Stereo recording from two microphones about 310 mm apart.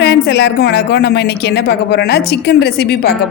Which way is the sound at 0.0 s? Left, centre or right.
Left.